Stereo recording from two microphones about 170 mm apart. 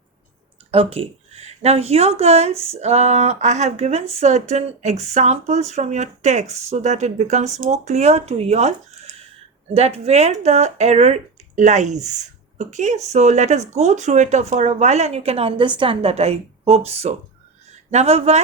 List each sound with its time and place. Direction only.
0.7 s speech: 35° right (ahead or behind)